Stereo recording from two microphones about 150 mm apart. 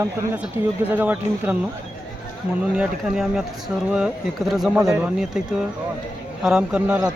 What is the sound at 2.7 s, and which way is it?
Speech, 5° right (ahead or behind).